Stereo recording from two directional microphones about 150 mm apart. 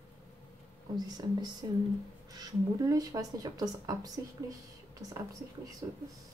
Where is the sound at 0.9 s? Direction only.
25° right (ahead or behind).